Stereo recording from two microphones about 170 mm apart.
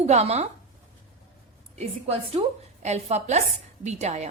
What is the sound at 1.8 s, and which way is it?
A woman's voice, 35° right (ahead or behind).